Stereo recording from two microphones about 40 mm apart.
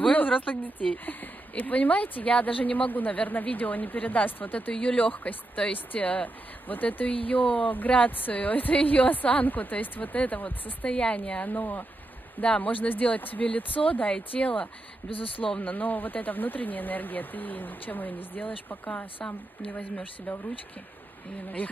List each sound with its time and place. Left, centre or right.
0.1 s speech: left
4.7 s speech: left
10.9 s a woman's voice: left
11.4 s speech: left
12.4 s speech: left
15.6 s speech: left